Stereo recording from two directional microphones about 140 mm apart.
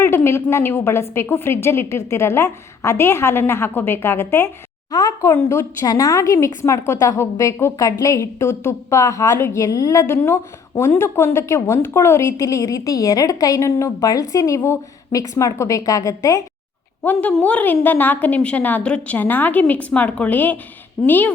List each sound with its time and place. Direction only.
0.0 s a woman's voice: 15° left (ahead or behind)
17.0 s a woman's voice: 10° left (ahead or behind)